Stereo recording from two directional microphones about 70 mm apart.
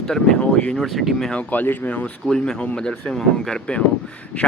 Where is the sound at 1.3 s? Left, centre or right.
Left.